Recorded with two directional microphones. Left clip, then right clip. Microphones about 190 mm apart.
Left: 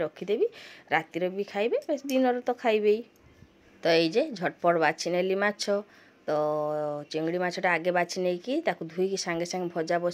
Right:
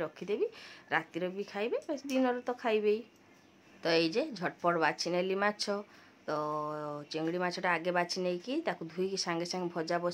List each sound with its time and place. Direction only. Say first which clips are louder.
0.0 s speech: left 7 dB; 20° left (ahead or behind)